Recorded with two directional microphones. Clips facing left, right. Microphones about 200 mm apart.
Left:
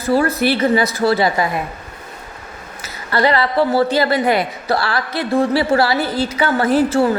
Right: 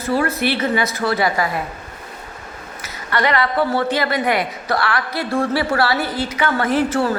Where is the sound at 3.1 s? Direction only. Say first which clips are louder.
Left 3 dB; 30° left (ahead or behind).